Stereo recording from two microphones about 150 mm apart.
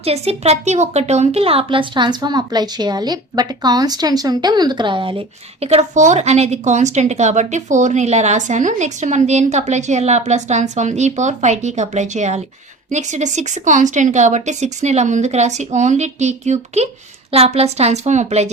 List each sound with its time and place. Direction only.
0.0 s speech: 45° right (ahead or behind)